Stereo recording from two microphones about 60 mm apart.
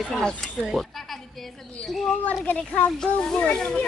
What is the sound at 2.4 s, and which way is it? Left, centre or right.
Speech, left.